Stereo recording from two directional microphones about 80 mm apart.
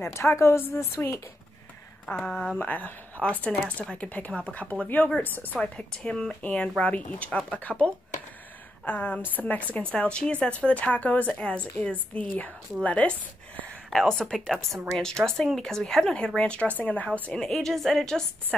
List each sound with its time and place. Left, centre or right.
0.0 s a woman's voice: left
2.0 s speech: centre
5.6 s speech: centre
17.4 s a woman's voice: centre